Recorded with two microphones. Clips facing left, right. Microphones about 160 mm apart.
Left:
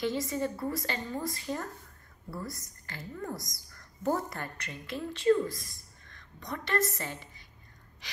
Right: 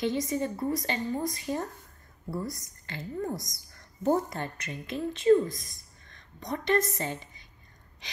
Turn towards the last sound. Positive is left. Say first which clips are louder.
# right 5 dB
turn(degrees=-20)  # may be behind; listen again after turning